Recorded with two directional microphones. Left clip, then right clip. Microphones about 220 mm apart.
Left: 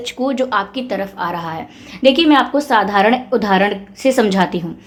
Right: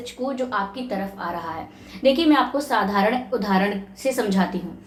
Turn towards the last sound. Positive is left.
turn(degrees=45)  # may be behind; listen again after turning